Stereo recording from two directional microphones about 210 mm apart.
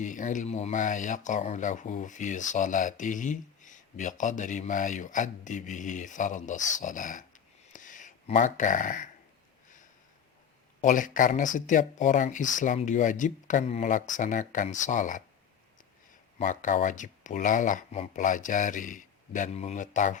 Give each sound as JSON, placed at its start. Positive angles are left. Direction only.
{"t": 0.0, "sound": "speech", "side_deg": 35}
{"t": 7.7, "sound": "a sound", "side_deg": 40}
{"t": 10.8, "sound": "speech", "side_deg": 35}
{"t": 16.4, "sound": "speech", "side_deg": 40}